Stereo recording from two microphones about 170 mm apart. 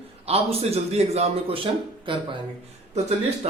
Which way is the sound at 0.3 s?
35° right (ahead or behind).